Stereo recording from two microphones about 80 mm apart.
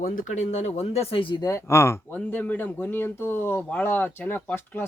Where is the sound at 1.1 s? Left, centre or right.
Left.